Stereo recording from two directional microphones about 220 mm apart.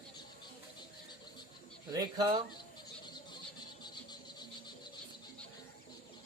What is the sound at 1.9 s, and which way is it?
Speech, 15° right (ahead or behind).